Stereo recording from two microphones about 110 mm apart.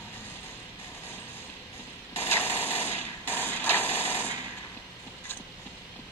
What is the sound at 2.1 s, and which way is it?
Mechanisms, 20° left (ahead or behind).